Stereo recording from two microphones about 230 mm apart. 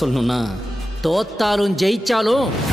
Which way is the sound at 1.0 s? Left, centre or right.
Centre.